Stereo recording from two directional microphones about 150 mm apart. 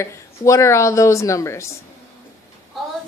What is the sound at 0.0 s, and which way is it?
A woman's voice, 20° left (ahead or behind).